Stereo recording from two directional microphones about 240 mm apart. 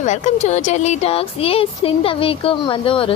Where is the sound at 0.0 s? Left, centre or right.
Left.